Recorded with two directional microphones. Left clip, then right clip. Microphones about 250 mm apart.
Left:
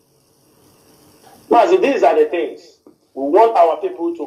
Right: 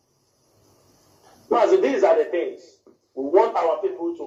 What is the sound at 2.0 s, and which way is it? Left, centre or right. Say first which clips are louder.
Speech: left 4 dB; left.